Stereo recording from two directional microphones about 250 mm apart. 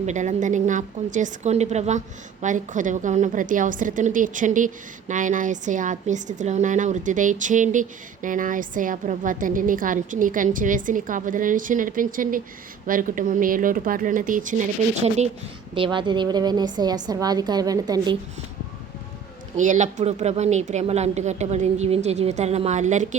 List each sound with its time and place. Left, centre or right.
0.0 s a woman's voice: right
19.5 s a woman's voice: right